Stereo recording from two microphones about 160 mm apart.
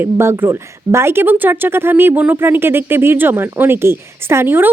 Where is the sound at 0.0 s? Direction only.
15° right (ahead or behind).